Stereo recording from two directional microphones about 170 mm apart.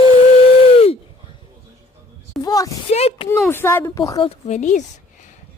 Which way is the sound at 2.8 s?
35° left (ahead or behind).